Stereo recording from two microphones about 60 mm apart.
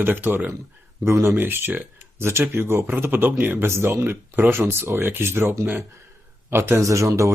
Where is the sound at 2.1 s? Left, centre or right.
Right.